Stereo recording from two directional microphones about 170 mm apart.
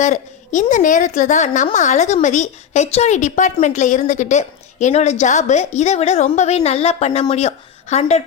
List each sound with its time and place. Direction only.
0.0 s a woman's voice: 45° left (ahead or behind)